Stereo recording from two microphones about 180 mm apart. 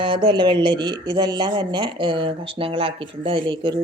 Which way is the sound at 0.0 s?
30° right (ahead or behind).